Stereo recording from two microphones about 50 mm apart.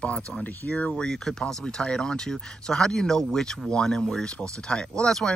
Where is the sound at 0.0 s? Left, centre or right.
Left.